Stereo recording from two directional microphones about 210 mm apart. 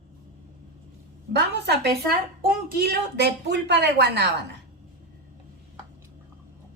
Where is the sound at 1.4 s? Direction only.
50° right (ahead or behind).